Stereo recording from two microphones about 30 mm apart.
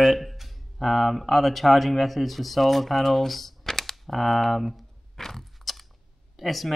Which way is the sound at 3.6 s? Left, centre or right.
Centre.